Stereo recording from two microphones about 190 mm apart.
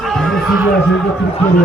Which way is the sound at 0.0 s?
Centre (ahead or behind).